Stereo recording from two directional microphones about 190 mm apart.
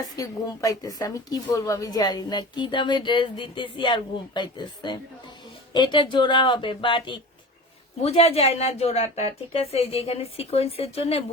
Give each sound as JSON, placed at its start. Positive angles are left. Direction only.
{"t": 0.2, "sound": "a woman's voice", "side_deg": 20}